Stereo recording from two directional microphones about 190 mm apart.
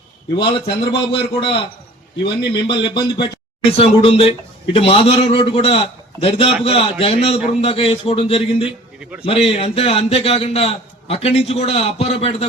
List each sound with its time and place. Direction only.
0.3 s a man's voice: 25° left (ahead or behind)